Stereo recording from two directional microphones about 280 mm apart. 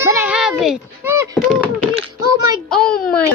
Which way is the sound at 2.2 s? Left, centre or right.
Centre.